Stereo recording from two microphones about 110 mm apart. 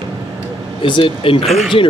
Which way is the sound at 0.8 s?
50° left (ahead or behind).